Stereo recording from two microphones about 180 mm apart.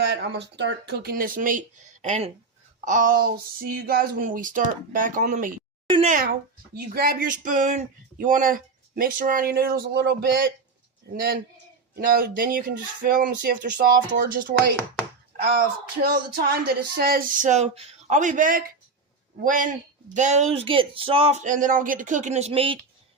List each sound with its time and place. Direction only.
0.0 s speech: 70° right (ahead or behind); by 14.8 s 50° right (ahead or behind)
16.0 s speech: 60° right (ahead or behind); by 22.8 s 30° right (ahead or behind)